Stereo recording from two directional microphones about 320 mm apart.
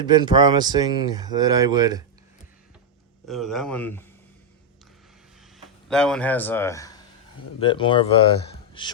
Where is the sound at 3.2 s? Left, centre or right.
Centre.